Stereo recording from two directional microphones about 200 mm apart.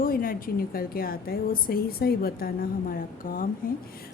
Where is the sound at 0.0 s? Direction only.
45° left (ahead or behind).